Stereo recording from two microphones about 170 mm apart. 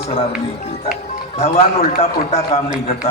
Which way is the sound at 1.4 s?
40° left (ahead or behind).